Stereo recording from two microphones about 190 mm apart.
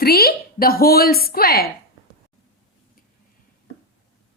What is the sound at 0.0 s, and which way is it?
A woman's voice, 55° left (ahead or behind).